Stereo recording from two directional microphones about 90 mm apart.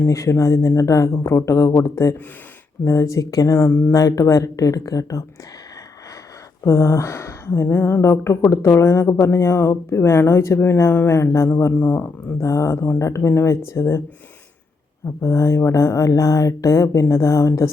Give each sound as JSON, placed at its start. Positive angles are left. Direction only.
{"t": 0.0, "sound": "a woman's voice", "side_deg": 35}
{"t": 3.7, "sound": "speech", "side_deg": 20}
{"t": 3.9, "sound": "a woman's voice", "side_deg": 40}
{"t": 6.7, "sound": "a woman's voice", "side_deg": 30}
{"t": 11.7, "sound": "a woman's voice", "side_deg": 20}
{"t": 15.0, "sound": "a woman's voice", "side_deg": 30}